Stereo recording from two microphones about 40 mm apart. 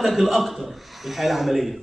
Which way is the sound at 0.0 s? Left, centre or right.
Centre.